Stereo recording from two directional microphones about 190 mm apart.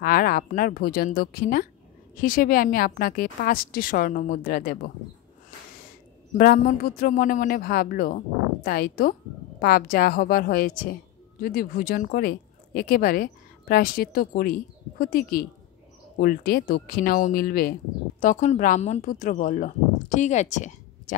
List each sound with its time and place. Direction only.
0.0 s speech: 50° left (ahead or behind)
6.3 s speech: 45° left (ahead or behind)